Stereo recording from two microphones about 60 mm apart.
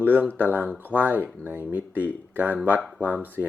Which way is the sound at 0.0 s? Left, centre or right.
Right.